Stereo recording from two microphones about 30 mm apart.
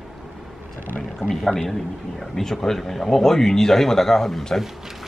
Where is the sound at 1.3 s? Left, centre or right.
Centre.